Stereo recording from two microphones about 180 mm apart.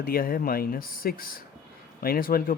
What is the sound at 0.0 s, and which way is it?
Speech, 55° left (ahead or behind).